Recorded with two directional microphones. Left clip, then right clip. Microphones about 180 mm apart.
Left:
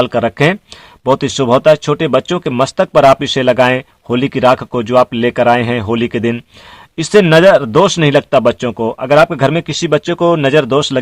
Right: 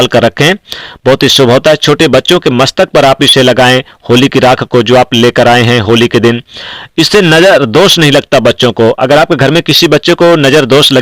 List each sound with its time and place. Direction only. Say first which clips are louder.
0.0 s speech: right 6 dB; 25° right (ahead or behind)